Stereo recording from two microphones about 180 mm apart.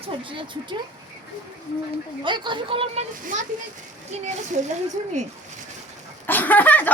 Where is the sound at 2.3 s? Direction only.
25° right (ahead or behind).